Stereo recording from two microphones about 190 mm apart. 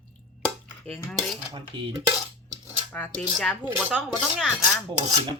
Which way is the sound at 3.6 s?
10° right (ahead or behind).